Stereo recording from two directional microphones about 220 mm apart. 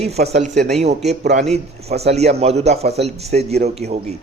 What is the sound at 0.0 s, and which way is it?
A man's voice, 30° right (ahead or behind).